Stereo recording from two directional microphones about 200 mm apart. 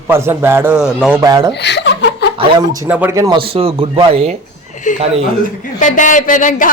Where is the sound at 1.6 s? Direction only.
60° left (ahead or behind).